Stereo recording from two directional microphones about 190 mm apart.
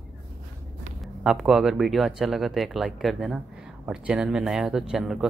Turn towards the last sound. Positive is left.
turn(degrees=0)  # may be behind; listen again after turning